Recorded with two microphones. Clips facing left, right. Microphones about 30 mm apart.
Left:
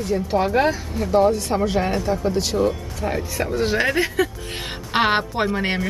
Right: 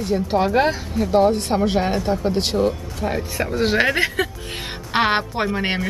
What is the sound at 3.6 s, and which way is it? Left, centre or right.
Speech, right.